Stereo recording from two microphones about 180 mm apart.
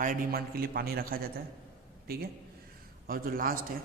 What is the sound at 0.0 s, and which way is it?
A man's voice, 55° right (ahead or behind).